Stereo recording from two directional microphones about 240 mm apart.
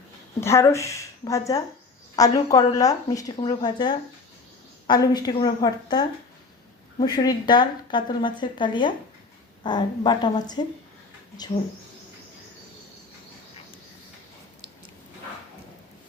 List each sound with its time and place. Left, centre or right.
0.3 s a woman's voice: centre